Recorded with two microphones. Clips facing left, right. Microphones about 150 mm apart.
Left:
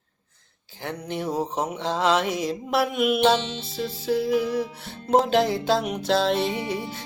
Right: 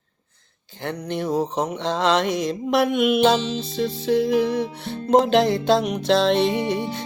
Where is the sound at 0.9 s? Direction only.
10° left (ahead or behind).